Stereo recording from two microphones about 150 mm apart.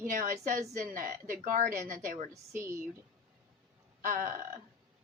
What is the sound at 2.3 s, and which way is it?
Speech, 20° right (ahead or behind).